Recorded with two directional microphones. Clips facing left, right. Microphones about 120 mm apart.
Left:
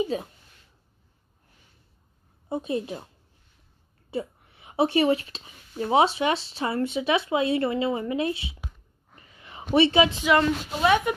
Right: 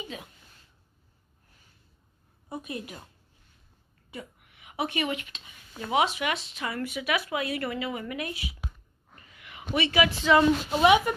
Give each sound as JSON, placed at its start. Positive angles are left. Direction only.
{"t": 2.5, "sound": "a woman's voice", "side_deg": 25}
{"t": 4.1, "sound": "a woman's voice", "side_deg": 30}
{"t": 9.1, "sound": "a sound", "side_deg": 30}
{"t": 10.4, "sound": "speech", "side_deg": -15}